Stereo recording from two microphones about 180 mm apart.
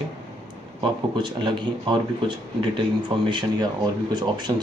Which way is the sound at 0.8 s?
25° right (ahead or behind).